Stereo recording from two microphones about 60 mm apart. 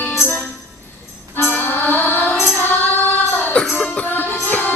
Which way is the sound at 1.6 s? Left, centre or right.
Left.